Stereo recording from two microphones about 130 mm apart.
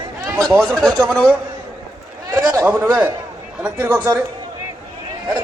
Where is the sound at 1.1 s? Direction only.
Centre (ahead or behind).